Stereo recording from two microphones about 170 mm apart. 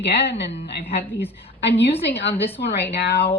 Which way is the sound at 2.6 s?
75° left (ahead or behind).